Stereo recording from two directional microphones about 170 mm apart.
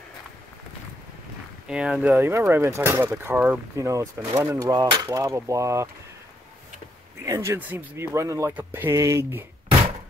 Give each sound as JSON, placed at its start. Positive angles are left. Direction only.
{"t": 1.7, "sound": "speech", "side_deg": -5}
{"t": 2.1, "sound": "speech", "side_deg": -15}
{"t": 4.4, "sound": "mechanisms", "side_deg": -20}
{"t": 7.2, "sound": "speech", "side_deg": -15}